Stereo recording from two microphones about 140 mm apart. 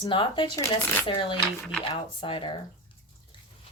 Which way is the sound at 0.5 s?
20° left (ahead or behind).